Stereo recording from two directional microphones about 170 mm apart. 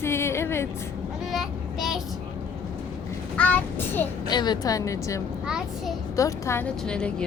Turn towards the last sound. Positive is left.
turn(degrees=5)  # may be behind; listen again after turning